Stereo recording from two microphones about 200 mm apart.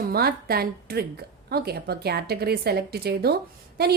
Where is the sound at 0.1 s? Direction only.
50° right (ahead or behind).